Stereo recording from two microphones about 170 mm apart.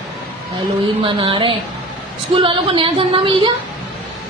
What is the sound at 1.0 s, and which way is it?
A woman's voice, 30° right (ahead or behind).